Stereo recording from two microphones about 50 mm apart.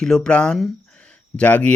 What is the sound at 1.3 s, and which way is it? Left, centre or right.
Speech, left.